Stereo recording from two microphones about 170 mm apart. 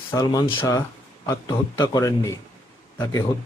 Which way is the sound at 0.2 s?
25° left (ahead or behind).